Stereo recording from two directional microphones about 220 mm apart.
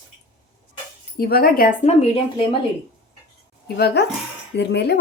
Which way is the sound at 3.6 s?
45° left (ahead or behind).